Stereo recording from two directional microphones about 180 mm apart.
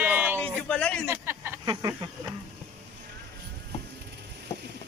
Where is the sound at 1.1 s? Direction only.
15° right (ahead or behind).